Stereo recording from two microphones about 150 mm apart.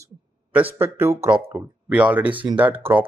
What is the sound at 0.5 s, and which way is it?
Speech, 10° right (ahead or behind).